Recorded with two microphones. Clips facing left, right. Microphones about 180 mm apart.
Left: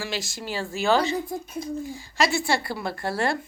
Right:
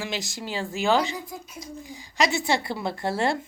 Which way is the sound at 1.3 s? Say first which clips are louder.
Left 8 dB; 60° left (ahead or behind).